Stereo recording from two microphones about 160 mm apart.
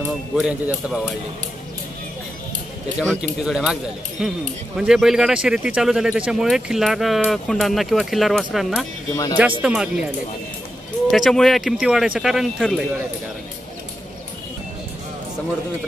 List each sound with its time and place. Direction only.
0.0 s speech: 5° right (ahead or behind)
3.0 s speech: centre (ahead or behind)
9.1 s speech: 20° left (ahead or behind)
9.6 s speech: 5° right (ahead or behind)
11.1 s speech: centre (ahead or behind)